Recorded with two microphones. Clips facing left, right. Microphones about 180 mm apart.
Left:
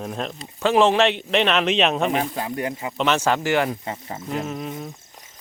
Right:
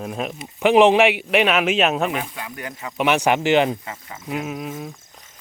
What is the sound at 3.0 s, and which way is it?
Speech, 15° right (ahead or behind).